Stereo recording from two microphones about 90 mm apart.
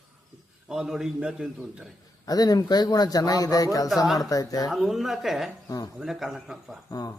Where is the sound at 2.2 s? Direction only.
45° left (ahead or behind).